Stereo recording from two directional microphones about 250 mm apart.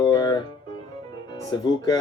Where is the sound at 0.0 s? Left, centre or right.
Centre.